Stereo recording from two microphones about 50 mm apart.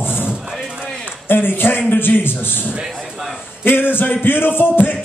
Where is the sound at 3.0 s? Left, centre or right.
Centre.